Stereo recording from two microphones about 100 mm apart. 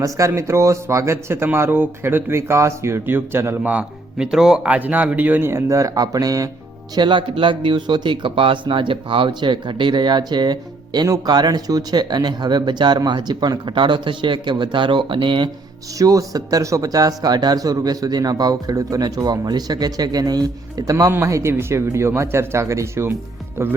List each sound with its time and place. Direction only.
0.0 s speech: 30° right (ahead or behind)
6.9 s speech: 50° right (ahead or behind)
16.0 s speech: 35° right (ahead or behind)